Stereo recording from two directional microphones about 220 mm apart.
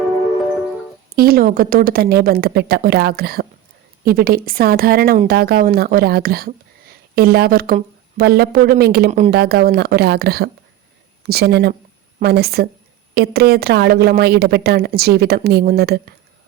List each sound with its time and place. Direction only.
1.1 s a woman's voice: 40° right (ahead or behind)